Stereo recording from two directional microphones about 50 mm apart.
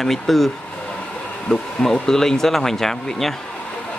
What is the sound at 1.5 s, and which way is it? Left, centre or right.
Speech, centre.